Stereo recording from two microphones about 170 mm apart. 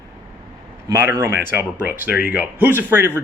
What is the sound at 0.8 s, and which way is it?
Speech, 15° right (ahead or behind).